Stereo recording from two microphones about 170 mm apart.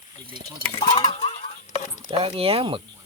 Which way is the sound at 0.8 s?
25° left (ahead or behind).